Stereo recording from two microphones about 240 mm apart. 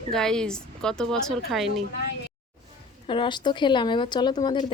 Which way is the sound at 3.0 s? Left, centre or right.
Left.